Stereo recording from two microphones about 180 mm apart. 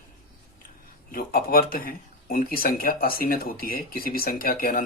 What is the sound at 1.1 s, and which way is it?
Speech, 55° left (ahead or behind).